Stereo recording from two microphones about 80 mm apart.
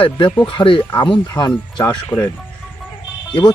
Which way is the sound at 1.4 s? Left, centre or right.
Left.